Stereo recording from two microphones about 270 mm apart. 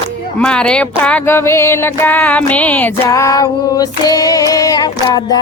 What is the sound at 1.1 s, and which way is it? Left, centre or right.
Music, centre.